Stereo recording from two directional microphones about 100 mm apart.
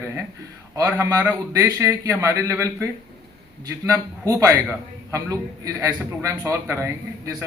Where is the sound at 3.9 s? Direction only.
35° right (ahead or behind).